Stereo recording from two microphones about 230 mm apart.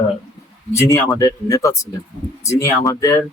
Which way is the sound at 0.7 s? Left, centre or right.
Centre.